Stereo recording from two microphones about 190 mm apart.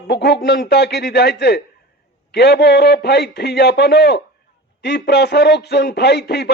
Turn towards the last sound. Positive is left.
turn(degrees=60)  # may be behind; listen again after turning